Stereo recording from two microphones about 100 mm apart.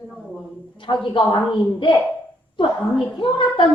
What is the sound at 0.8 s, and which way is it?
A woman's voice, 55° left (ahead or behind).